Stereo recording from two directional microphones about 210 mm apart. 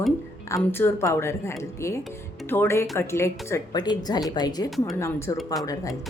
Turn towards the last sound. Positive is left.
turn(degrees=15)  # may be behind; listen again after turning